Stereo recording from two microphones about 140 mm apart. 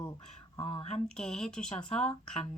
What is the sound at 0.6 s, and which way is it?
Speech, 40° left (ahead or behind).